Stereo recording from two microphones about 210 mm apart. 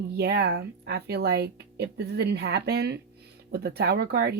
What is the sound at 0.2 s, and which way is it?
Speech, 50° right (ahead or behind).